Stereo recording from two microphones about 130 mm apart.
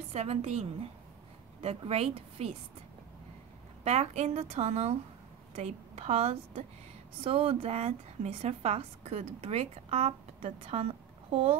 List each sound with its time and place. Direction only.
0.1 s a woman's voice: 55° right (ahead or behind)
3.8 s a woman's voice: 55° right (ahead or behind)